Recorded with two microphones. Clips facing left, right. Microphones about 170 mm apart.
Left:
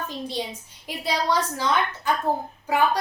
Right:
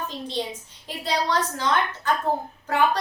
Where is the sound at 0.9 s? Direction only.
10° left (ahead or behind).